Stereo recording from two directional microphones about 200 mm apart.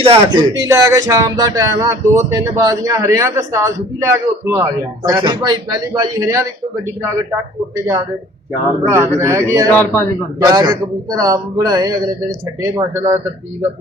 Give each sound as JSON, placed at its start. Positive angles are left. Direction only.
{"t": 0.0, "sound": "speech", "side_deg": -25}
{"t": 8.8, "sound": "speech", "side_deg": -10}
{"t": 9.7, "sound": "a man's voice", "side_deg": 10}
{"t": 10.4, "sound": "a man's voice", "side_deg": -15}